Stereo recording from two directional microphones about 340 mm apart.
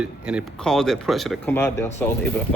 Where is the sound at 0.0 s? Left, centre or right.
Centre.